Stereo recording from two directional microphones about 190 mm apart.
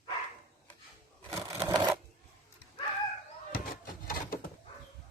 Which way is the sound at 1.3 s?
15° right (ahead or behind).